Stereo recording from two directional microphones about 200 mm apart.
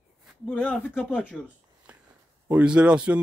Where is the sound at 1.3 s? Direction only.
5° right (ahead or behind).